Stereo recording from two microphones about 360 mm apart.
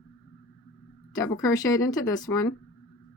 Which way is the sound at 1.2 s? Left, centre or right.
Centre.